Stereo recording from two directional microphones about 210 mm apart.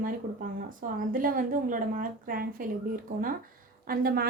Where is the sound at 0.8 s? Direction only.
40° right (ahead or behind).